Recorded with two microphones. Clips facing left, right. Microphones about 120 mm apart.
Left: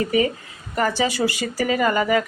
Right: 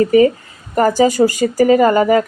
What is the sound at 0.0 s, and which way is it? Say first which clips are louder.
A woman's voice: right 10 dB; 40° right (ahead or behind).